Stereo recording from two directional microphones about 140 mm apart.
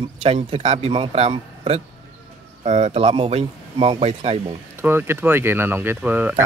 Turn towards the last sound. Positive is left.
turn(degrees=-15)  # may be behind; listen again after turning